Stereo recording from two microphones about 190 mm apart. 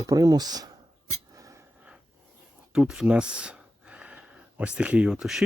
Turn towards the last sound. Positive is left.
turn(degrees=0)  # may be behind; listen again after turning